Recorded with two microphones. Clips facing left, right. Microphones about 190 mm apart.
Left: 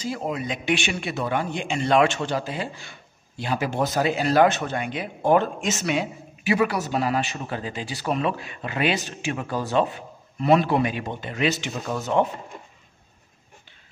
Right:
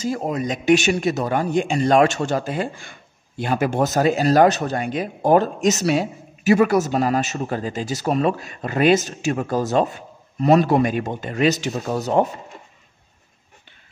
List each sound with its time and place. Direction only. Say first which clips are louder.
0.0 s speech: right 5 dB; 45° right (ahead or behind)